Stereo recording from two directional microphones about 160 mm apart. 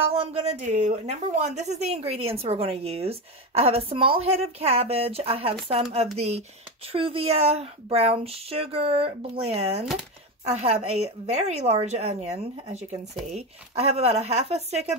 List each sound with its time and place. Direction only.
0.1 s a woman's voice: 35° right (ahead or behind)